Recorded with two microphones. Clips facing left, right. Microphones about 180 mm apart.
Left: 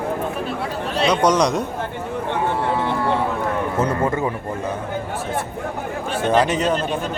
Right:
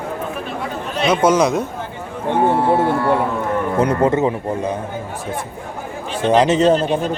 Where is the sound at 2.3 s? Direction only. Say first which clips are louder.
Right 7 dB; 50° right (ahead or behind).